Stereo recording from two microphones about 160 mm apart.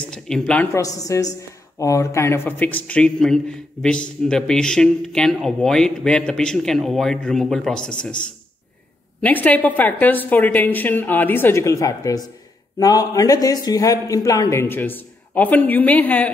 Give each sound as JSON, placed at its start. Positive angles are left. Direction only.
{"t": 0.1, "sound": "speech", "side_deg": 5}
{"t": 0.7, "sound": "a man's voice", "side_deg": 20}
{"t": 9.2, "sound": "a woman's voice", "side_deg": 10}